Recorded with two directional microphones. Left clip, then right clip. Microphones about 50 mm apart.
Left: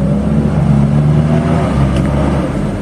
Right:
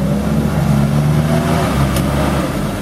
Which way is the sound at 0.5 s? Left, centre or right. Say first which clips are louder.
Left 2 dB; right.